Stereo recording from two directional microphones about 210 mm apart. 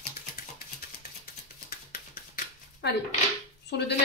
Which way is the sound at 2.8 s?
55° left (ahead or behind).